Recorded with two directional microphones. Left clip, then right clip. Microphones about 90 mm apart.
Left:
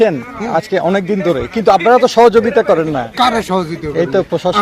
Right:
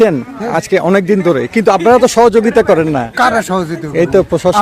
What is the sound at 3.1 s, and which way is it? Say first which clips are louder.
Speech: right 1 dB; 90° right.